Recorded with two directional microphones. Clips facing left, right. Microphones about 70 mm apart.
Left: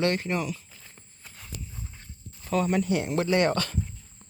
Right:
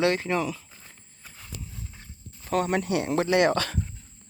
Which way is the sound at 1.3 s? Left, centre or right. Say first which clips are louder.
Right 1 dB; centre.